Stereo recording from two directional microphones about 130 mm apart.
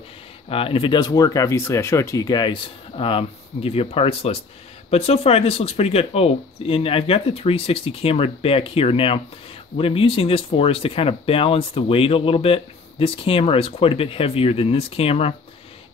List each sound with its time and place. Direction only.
0.5 s speech: 45° left (ahead or behind)